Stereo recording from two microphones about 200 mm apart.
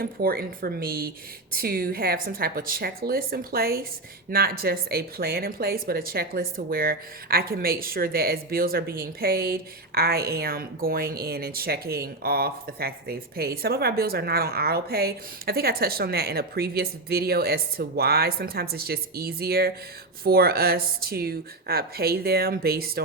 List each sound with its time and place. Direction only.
0.0 s speech: 50° right (ahead or behind)